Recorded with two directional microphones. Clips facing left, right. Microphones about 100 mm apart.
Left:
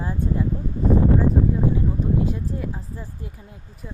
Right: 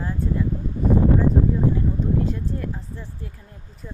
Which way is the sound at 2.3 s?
10° left (ahead or behind).